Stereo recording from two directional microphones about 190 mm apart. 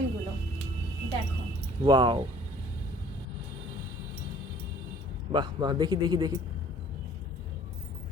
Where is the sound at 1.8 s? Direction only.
25° right (ahead or behind).